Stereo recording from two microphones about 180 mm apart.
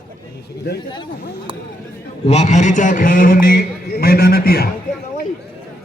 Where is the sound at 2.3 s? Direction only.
40° left (ahead or behind); by 4.7 s 60° left (ahead or behind).